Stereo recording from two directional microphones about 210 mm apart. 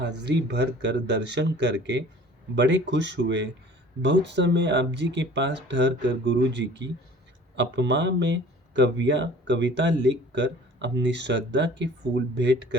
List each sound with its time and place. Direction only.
0.2 s speech: 55° right (ahead or behind)